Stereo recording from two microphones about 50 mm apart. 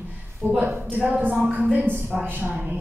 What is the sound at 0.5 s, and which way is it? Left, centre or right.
Speech, right.